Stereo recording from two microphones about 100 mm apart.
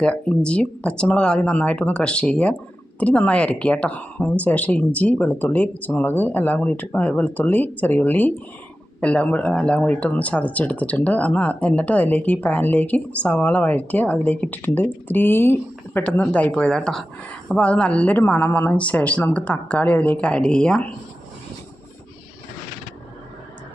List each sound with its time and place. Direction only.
0.0 s speech: 10° left (ahead or behind)